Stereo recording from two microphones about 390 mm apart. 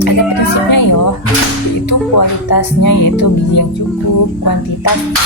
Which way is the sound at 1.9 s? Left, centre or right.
Left.